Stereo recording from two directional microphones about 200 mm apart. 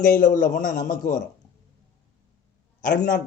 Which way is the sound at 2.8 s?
40° left (ahead or behind).